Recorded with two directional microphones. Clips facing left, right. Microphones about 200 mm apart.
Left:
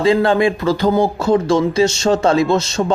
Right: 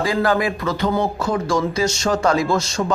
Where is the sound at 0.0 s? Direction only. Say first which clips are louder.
Left 6 dB; 25° left (ahead or behind).